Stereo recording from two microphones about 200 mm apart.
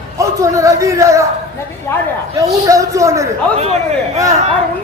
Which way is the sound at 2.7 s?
15° right (ahead or behind).